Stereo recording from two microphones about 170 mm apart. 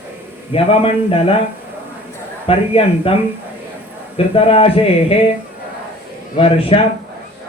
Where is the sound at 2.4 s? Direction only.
35° left (ahead or behind).